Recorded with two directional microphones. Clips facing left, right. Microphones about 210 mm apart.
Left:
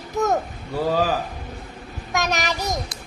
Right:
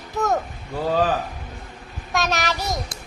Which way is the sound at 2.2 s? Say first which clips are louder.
Even; 15° left (ahead or behind).